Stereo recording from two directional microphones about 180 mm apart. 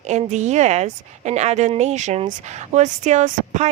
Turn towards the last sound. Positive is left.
turn(degrees=-40)  # may be behind; listen again after turning